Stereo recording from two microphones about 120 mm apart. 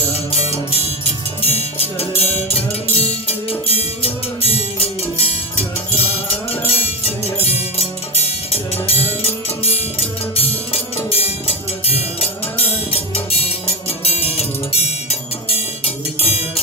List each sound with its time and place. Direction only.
0.1 s music: 60° left (ahead or behind)
6.5 s music: 55° left (ahead or behind)